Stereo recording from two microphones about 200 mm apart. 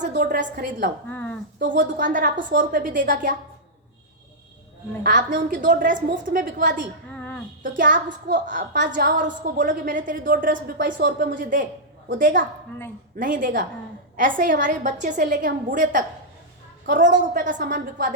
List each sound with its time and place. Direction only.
0.3 s a woman's voice: 40° right (ahead or behind)
1.1 s a sound: 5° left (ahead or behind)
1.6 s a woman's voice: 40° right (ahead or behind)
5.0 s a woman's voice: 45° right (ahead or behind)